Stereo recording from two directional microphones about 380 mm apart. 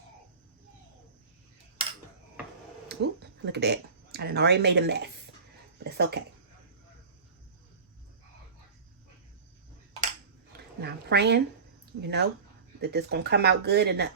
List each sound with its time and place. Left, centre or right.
2.9 s speech: right
10.8 s speech: right